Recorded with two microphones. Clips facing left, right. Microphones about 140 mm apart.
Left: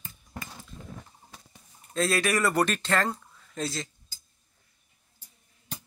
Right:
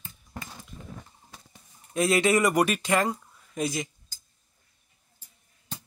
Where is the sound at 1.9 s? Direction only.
20° right (ahead or behind).